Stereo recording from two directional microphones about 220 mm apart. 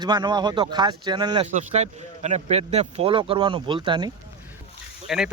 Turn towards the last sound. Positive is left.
turn(degrees=0)  # may be behind; listen again after turning